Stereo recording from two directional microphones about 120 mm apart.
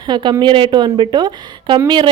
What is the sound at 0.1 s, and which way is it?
A woman's voice, 40° right (ahead or behind).